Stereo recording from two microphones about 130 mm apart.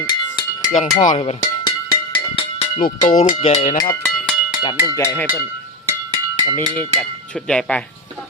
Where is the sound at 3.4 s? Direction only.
65° left (ahead or behind).